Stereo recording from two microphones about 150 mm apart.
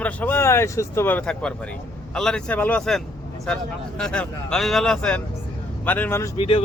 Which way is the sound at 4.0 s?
5° left (ahead or behind).